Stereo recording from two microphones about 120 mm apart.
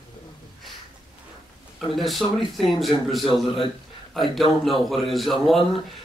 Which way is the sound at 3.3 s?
45° left (ahead or behind).